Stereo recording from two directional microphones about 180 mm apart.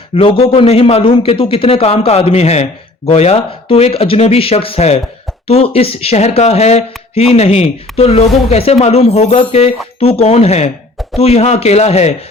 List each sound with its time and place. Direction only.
0.2 s speech: 30° left (ahead or behind)